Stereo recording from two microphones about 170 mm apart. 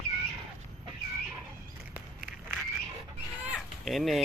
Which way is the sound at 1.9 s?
5° right (ahead or behind).